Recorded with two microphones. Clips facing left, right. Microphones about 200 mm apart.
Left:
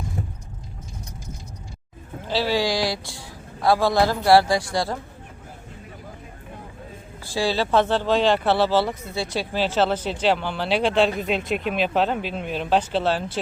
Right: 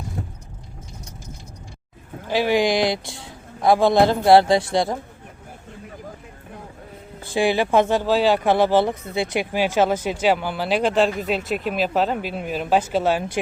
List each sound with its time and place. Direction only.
2.2 s a man's voice: 15° right (ahead or behind)
7.3 s speech: 15° right (ahead or behind)